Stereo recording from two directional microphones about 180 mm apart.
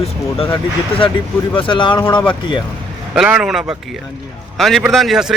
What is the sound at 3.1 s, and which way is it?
Speech, 5° right (ahead or behind).